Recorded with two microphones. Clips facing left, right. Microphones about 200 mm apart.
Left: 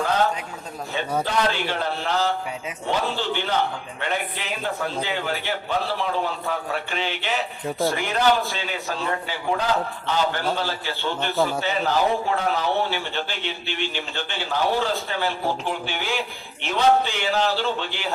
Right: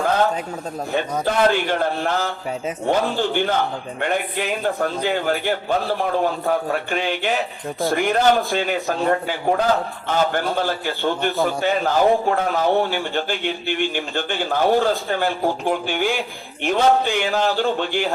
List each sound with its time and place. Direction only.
1.2 s a man's voice: 50° right (ahead or behind)